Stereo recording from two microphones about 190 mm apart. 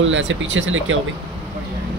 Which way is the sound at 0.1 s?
85° right.